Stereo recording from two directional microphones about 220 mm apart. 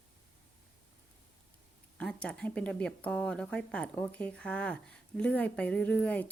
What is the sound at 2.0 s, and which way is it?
A woman's voice, 5° left (ahead or behind).